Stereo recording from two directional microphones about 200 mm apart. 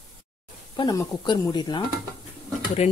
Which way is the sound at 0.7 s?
20° left (ahead or behind).